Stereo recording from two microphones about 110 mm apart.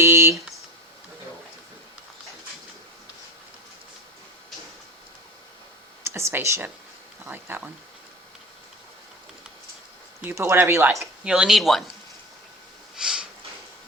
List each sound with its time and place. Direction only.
0.0 s a sound: 20° right (ahead or behind)
6.1 s speech: 25° right (ahead or behind)
10.3 s speech: 25° right (ahead or behind)
10.9 s speech: 5° right (ahead or behind)
13.0 s snort: 5° right (ahead or behind)